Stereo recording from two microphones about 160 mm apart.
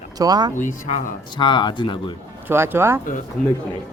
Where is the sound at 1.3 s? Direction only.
30° left (ahead or behind).